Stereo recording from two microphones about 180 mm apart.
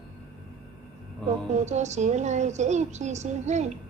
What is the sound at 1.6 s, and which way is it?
A child's voice, 40° right (ahead or behind).